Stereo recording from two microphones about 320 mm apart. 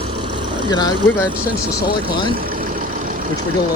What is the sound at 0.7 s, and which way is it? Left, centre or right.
Speech, centre.